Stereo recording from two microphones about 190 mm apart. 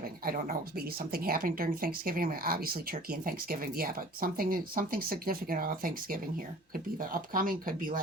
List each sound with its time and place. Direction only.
0.3 s speech: 50° right (ahead or behind)